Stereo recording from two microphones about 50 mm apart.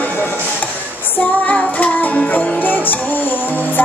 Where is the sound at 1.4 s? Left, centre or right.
Left.